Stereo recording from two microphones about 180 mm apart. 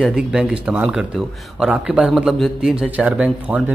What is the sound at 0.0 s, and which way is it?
Speech, 5° right (ahead or behind).